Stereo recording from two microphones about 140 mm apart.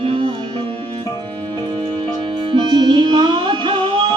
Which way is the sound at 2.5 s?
35° right (ahead or behind).